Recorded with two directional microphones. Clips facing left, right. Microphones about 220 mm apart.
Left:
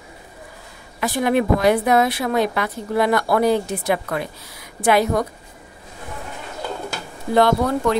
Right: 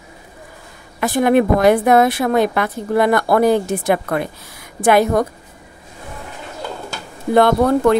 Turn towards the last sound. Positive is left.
turn(degrees=-55)  # may be behind; listen again after turning